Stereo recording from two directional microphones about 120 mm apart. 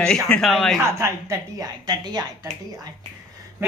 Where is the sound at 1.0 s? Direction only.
30° right (ahead or behind).